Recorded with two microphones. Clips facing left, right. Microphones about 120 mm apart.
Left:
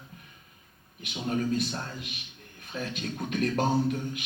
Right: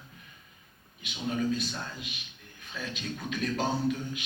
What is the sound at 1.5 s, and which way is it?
A man's voice, 55° left (ahead or behind).